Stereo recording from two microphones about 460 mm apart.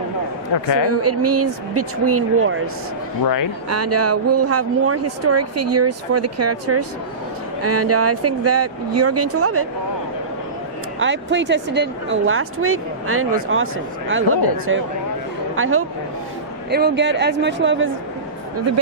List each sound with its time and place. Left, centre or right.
0.9 s speech: right
3.7 s speech: right
11.0 s speech: right